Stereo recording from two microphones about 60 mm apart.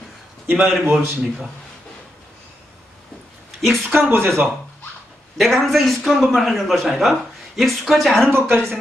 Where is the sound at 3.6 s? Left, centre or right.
Centre.